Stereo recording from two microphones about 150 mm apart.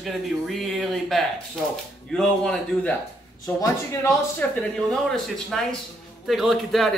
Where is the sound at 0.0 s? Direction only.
Centre (ahead or behind).